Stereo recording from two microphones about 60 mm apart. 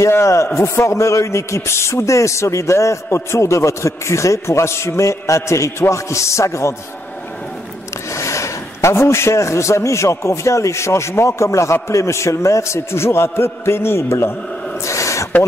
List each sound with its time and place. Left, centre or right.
0.1 s a man's voice: left
8.1 s a man's voice: left
14.9 s a sound: left